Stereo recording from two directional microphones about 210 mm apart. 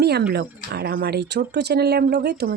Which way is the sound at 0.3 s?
50° right (ahead or behind).